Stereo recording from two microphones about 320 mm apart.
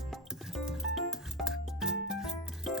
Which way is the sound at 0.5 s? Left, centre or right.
Centre.